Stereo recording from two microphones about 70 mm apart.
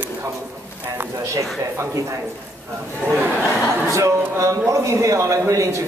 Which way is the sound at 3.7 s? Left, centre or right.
Right.